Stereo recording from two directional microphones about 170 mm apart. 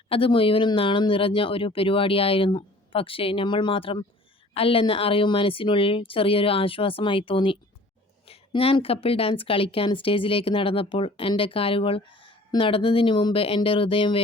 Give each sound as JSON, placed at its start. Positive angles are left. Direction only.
{"t": 0.1, "sound": "a woman's voice", "side_deg": 30}